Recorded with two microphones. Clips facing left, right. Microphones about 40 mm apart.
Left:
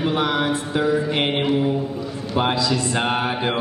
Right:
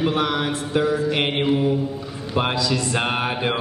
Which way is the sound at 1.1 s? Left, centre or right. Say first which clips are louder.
Left 1 dB; centre.